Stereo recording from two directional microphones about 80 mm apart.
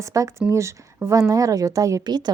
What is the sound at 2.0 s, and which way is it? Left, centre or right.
Speech, right.